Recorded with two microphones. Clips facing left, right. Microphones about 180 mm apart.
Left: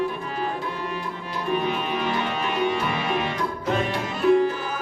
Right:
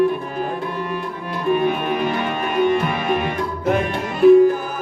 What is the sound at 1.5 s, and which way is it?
Music, 50° right (ahead or behind).